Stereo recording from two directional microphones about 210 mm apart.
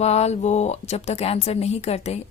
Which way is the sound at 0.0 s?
30° left (ahead or behind).